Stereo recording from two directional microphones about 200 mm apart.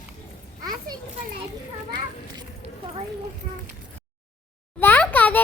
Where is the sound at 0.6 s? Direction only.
20° right (ahead or behind).